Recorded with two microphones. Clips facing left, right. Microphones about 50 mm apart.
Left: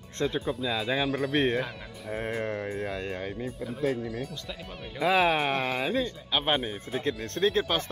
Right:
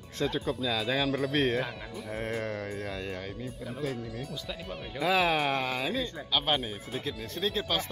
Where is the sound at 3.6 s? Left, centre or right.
Centre.